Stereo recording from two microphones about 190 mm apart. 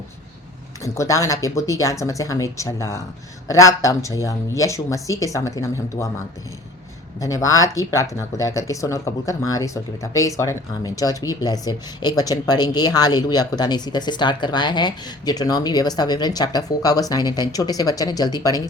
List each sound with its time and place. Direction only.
0.9 s speech: 15° left (ahead or behind)
7.2 s speech: 20° left (ahead or behind)